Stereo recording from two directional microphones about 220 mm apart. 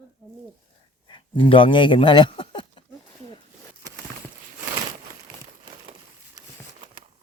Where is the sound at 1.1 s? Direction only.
25° left (ahead or behind).